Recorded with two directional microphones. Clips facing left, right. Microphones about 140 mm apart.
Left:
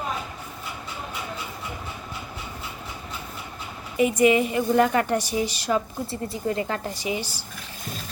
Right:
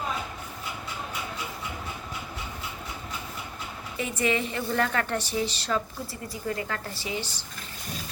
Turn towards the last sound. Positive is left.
turn(degrees=10)  # may be behind; listen again after turning